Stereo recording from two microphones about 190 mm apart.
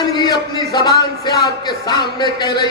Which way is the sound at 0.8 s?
20° left (ahead or behind).